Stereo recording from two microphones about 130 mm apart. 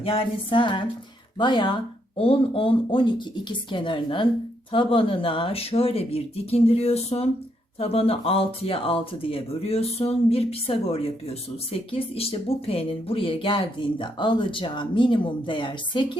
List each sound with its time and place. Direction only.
0.0 s speech: 45° left (ahead or behind)